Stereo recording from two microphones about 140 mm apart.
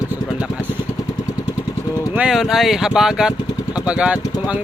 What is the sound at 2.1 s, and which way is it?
Speech, 5° right (ahead or behind).